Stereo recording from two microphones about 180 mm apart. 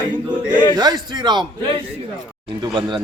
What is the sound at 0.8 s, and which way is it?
Speech, 20° right (ahead or behind).